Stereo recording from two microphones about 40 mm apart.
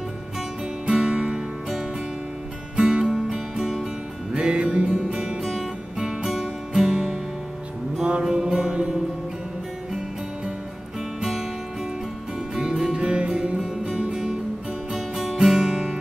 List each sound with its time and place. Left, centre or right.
0.8 s music: centre
2.7 s music: right
4.3 s music: right
11.1 s music: centre
12.5 s music: centre